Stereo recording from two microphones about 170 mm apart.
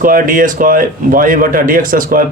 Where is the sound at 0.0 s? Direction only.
55° right (ahead or behind).